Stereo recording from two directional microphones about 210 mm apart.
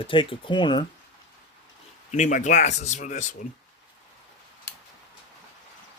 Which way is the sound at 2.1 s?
35° left (ahead or behind).